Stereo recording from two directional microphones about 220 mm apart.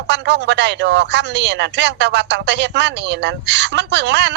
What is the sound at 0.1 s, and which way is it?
Speech, 50° right (ahead or behind).